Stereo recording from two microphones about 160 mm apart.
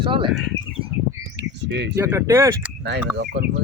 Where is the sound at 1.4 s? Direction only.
90° right.